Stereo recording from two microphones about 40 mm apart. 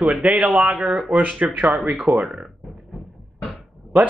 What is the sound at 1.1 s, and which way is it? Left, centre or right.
Speech, right.